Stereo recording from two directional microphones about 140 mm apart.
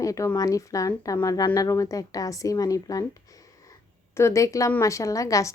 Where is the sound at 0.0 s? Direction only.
25° left (ahead or behind).